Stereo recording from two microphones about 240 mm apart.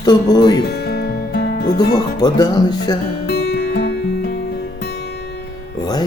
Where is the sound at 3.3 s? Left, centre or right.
Left.